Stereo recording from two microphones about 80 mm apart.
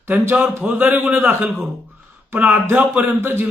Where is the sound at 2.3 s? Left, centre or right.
Right.